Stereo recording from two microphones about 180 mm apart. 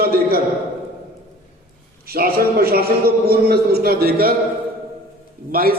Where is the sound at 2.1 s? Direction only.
60° right (ahead or behind).